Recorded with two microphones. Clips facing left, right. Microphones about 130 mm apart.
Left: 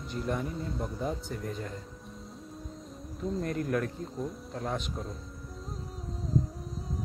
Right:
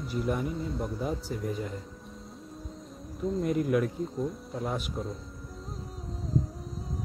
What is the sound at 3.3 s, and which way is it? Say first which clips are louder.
Speech: right 4 dB; 5° right (ahead or behind).